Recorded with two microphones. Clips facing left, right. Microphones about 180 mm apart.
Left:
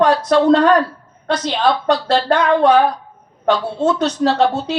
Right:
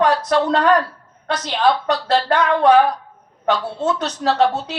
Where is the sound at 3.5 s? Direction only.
30° left (ahead or behind).